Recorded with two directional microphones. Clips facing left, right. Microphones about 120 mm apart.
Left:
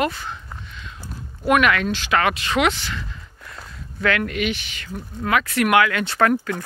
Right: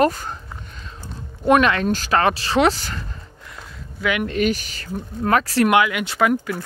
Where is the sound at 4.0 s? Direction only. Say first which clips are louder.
Left 1 dB; 15° right (ahead or behind).